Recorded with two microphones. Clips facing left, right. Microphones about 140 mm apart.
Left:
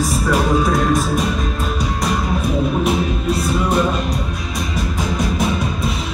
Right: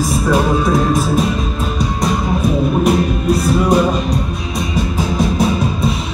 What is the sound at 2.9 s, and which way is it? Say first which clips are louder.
Music: right 4 dB; centre (ahead or behind).